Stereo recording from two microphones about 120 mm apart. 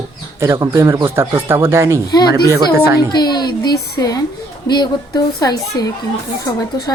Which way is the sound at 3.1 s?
35° left (ahead or behind).